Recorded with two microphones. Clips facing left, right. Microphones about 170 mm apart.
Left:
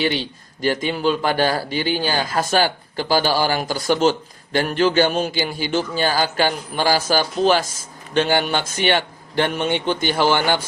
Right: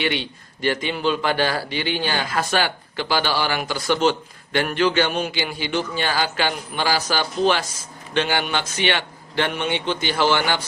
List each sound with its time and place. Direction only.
0.0 s a man's voice: 35° left (ahead or behind)